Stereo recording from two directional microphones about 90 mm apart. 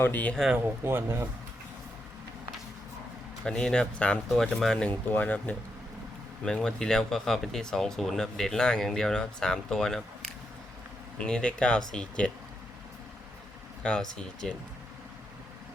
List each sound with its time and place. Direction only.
0.0 s speech: 20° left (ahead or behind)
0.5 s speech: 25° right (ahead or behind)
3.4 s speech: 10° left (ahead or behind)
4.9 s speech: 20° left (ahead or behind)
11.2 s speech: 10° left (ahead or behind)
13.8 s speech: 10° left (ahead or behind)